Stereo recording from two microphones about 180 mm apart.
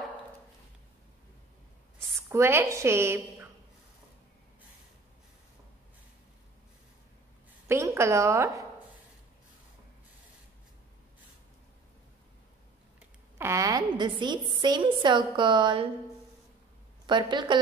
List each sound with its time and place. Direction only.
2.2 s a woman's voice: 15° right (ahead or behind)
7.6 s a sound: 15° right (ahead or behind)
13.4 s a woman's voice: 15° right (ahead or behind)
17.0 s a woman's voice: 25° right (ahead or behind)